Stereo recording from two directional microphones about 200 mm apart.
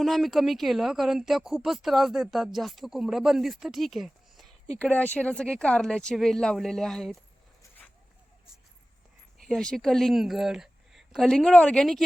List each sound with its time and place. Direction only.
0.0 s speech: centre (ahead or behind)
9.5 s speech: centre (ahead or behind)